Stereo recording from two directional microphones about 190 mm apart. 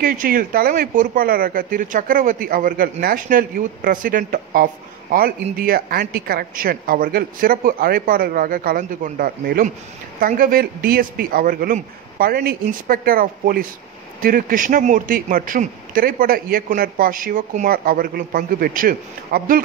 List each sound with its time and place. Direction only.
0.0 s a man's voice: 50° right (ahead or behind)